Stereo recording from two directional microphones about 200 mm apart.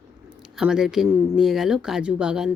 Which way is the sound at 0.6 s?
5° right (ahead or behind).